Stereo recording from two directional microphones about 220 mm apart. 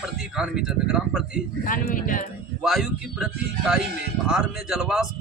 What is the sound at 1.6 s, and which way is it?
Speech, 40° left (ahead or behind).